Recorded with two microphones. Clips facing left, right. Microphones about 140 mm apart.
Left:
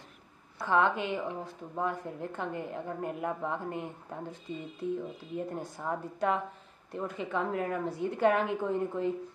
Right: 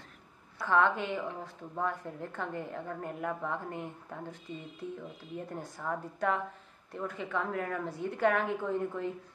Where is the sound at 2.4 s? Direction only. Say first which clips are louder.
Even; 20° left (ahead or behind).